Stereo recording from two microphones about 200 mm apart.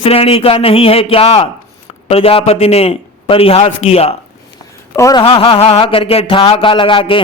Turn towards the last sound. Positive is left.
turn(degrees=25)  # may be behind; listen again after turning